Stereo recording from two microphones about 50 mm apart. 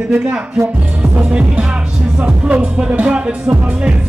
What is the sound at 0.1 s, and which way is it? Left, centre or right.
Speech, centre.